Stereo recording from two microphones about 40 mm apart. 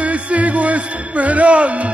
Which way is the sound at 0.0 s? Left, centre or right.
Right.